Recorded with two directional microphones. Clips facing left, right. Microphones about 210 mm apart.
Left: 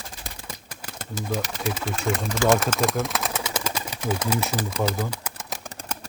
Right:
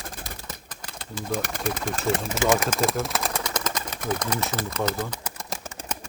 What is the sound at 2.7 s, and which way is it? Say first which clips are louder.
Speech: left 1 dB; 5° right (ahead or behind).